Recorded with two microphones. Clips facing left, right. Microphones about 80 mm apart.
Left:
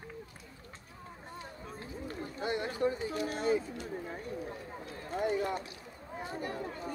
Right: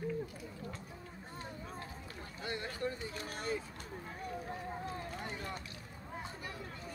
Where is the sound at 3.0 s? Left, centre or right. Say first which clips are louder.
Left 8 dB; left.